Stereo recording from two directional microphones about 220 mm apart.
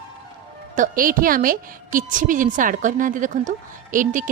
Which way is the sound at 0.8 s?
40° right (ahead or behind).